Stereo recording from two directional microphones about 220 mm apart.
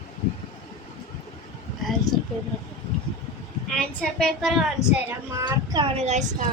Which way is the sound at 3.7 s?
5° left (ahead or behind).